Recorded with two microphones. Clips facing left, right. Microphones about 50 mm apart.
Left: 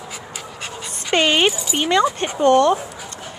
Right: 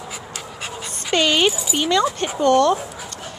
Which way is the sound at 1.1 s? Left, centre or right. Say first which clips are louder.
Left 1 dB; left.